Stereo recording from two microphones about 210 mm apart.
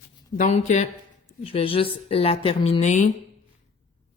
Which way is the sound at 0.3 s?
35° left (ahead or behind).